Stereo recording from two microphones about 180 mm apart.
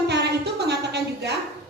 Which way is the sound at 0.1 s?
70° right (ahead or behind).